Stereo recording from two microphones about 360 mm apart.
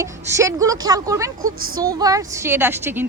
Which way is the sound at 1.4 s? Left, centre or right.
Right.